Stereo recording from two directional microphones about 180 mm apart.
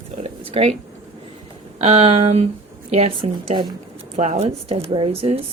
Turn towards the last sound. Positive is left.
turn(degrees=-35)  # may be behind; listen again after turning